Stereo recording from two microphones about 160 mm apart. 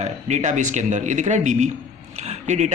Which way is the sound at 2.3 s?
45° right (ahead or behind).